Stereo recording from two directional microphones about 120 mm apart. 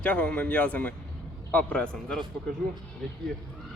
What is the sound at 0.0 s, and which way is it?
A man's voice, 10° left (ahead or behind).